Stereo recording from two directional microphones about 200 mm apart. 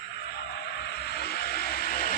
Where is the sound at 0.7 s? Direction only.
55° left (ahead or behind).